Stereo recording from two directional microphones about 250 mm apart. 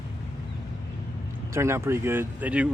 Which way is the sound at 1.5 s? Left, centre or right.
Centre.